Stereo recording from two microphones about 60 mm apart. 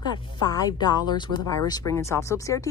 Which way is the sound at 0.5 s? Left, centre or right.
Left.